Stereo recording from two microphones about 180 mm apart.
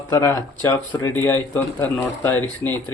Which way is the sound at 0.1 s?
15° left (ahead or behind).